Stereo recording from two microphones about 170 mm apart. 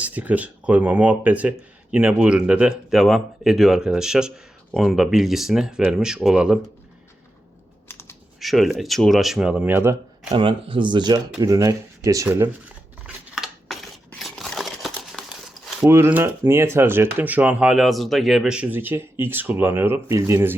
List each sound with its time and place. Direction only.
0.0 s speech: 10° right (ahead or behind)
7.9 s computer keyboard: 15° left (ahead or behind)
8.4 s speech: centre (ahead or behind)
10.3 s speech: 30° right (ahead or behind); by 12.7 s 15° right (ahead or behind)
13.3 s a sound: centre (ahead or behind)
14.1 s crumpling: centre (ahead or behind)
15.9 s speech: 15° right (ahead or behind)